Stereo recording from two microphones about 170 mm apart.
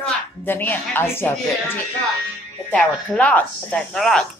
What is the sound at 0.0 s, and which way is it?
A woman's voice, 10° left (ahead or behind).